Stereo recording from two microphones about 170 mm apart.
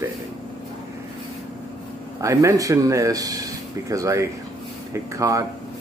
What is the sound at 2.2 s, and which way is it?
Speech, 20° right (ahead or behind).